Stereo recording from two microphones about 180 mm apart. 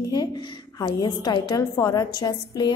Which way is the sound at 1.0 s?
25° left (ahead or behind).